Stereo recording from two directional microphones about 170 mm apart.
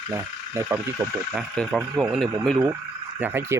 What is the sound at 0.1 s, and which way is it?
Speech, 15° right (ahead or behind).